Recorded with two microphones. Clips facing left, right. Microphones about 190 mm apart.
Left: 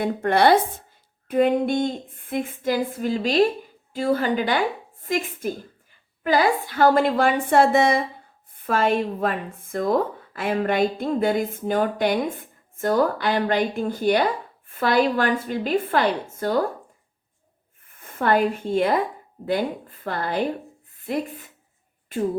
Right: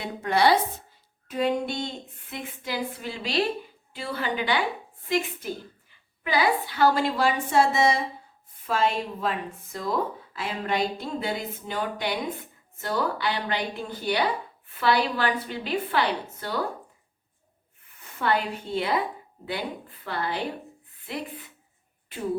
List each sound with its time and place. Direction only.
0.0 s a woman's voice: 55° left (ahead or behind)
17.9 s speech: 50° left (ahead or behind)